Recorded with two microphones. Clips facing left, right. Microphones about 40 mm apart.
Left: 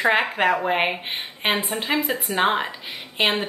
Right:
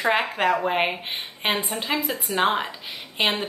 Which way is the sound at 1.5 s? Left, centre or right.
Left.